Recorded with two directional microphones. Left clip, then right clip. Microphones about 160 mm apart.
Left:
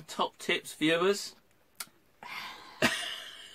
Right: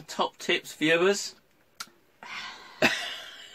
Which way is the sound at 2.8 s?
10° right (ahead or behind).